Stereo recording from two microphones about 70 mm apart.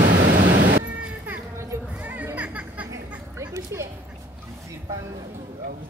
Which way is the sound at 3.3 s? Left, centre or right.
Right.